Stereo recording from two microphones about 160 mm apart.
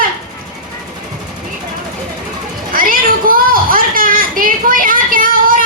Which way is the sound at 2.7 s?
60° right (ahead or behind).